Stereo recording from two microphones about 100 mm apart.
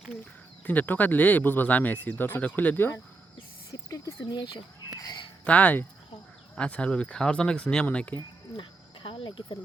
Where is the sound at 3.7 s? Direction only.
30° left (ahead or behind).